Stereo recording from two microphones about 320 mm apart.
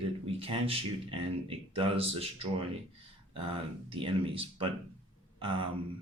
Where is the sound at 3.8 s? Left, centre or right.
Centre.